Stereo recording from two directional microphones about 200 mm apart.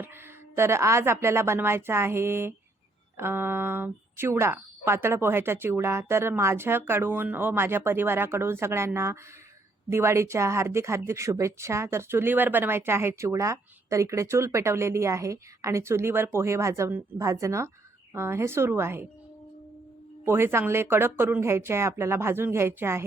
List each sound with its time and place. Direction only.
0.5 s speech: 15° right (ahead or behind)
20.2 s speech: 10° right (ahead or behind)